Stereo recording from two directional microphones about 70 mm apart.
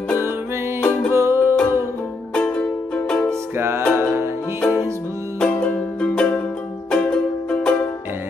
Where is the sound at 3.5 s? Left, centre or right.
Right.